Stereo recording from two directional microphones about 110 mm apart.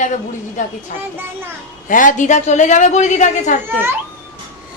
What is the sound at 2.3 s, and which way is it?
A woman's voice, 90° left.